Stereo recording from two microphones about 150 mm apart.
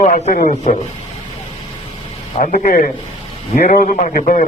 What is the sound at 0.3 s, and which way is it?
Speech, 50° left (ahead or behind).